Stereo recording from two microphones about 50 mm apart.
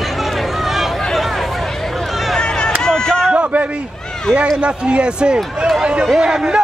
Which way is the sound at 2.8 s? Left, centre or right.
Centre.